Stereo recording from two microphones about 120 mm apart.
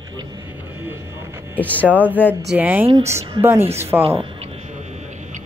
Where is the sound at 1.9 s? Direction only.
15° right (ahead or behind).